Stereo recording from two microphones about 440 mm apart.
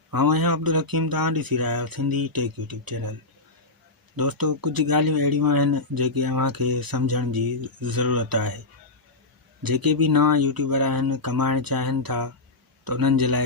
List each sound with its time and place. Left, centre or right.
0.1 s speech: right
4.2 s speech: right
9.6 s speech: right